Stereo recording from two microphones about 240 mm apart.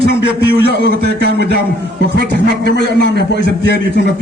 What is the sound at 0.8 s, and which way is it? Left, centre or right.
Speech, right.